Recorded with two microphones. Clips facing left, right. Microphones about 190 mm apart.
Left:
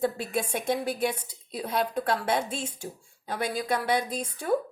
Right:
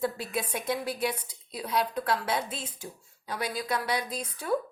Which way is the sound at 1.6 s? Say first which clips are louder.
Left 1 dB; 50° left (ahead or behind).